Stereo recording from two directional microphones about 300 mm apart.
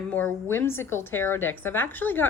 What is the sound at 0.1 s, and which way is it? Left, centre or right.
A woman's voice, centre.